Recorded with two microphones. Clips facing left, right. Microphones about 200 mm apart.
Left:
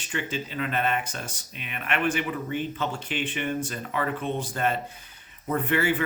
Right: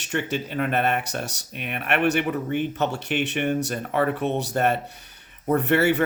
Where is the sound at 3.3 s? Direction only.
45° right (ahead or behind).